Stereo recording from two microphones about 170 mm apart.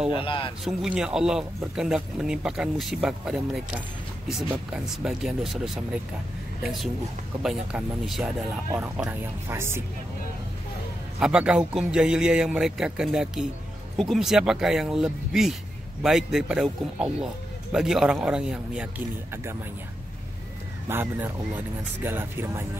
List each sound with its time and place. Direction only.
0.2 s speech: 30° left (ahead or behind)
0.7 s a man's voice: centre (ahead or behind)
11.1 s a man's voice: 5° right (ahead or behind)
20.9 s speech: 10° right (ahead or behind)